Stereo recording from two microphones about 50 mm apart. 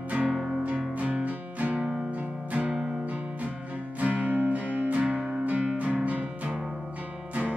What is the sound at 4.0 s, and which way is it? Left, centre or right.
Music, right.